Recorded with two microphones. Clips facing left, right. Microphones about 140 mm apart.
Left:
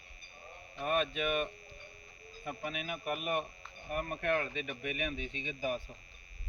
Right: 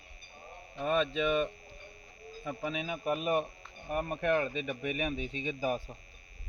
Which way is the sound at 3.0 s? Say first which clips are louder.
Right 5 dB; 30° right (ahead or behind).